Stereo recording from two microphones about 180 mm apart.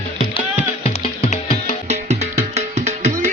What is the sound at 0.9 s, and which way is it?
Music, 35° left (ahead or behind).